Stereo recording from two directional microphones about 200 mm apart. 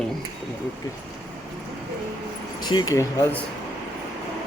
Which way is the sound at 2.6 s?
20° left (ahead or behind).